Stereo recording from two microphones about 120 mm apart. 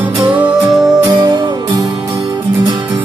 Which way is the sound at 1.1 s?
40° right (ahead or behind).